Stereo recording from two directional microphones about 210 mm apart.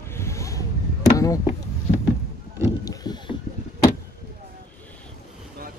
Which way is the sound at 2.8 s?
15° left (ahead or behind).